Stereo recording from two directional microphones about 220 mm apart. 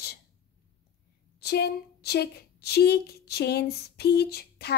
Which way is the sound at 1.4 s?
45° left (ahead or behind).